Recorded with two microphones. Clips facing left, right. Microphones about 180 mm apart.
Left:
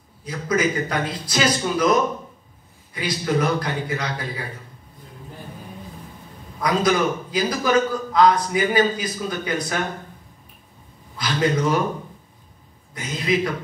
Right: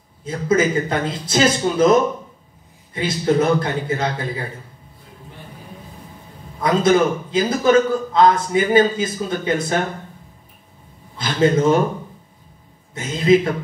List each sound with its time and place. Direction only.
0.2 s a man's voice: 25° right (ahead or behind)
6.6 s a man's voice: 25° right (ahead or behind)
11.1 s a man's voice: 25° right (ahead or behind)
12.9 s a man's voice: 25° right (ahead or behind)